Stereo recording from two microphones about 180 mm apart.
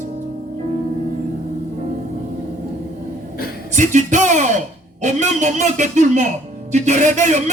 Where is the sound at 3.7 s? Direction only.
45° right (ahead or behind).